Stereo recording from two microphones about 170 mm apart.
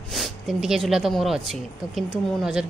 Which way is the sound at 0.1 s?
Centre (ahead or behind).